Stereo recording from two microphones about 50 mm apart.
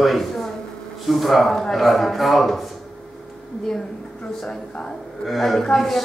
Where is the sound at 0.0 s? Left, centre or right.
Centre.